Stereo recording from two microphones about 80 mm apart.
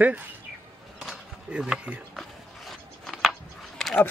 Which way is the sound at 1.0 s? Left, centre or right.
Centre.